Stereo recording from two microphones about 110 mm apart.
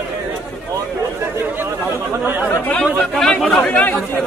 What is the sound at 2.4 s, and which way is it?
Speech, 15° left (ahead or behind).